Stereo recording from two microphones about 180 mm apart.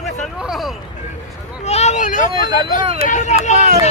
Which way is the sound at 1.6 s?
40° left (ahead or behind).